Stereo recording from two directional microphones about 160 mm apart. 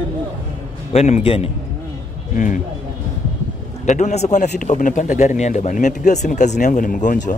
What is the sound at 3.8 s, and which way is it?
Speech, 45° left (ahead or behind).